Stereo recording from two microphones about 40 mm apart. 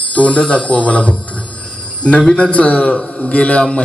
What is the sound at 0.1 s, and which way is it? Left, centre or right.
A man's voice, left.